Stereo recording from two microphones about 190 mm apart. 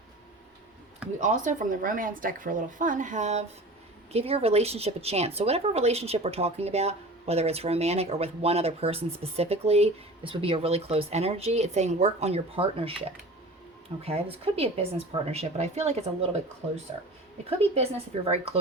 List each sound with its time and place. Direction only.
1.2 s a woman's voice: 40° right (ahead or behind)
14.0 s a woman's voice: 30° right (ahead or behind)
18.3 s a woman's voice: 30° right (ahead or behind)